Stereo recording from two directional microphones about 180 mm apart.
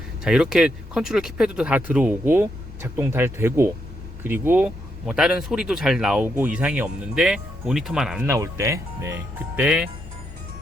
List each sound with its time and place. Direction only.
0.3 s speech: 5° right (ahead or behind)
8.4 s speech: 15° right (ahead or behind)